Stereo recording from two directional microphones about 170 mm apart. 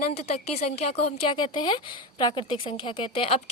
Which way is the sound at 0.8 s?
35° left (ahead or behind).